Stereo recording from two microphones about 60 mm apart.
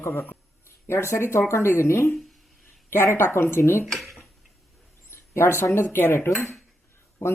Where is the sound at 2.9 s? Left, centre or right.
Left.